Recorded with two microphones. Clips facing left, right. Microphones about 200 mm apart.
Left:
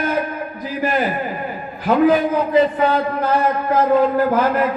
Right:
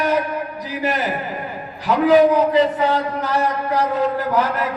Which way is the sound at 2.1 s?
80° right.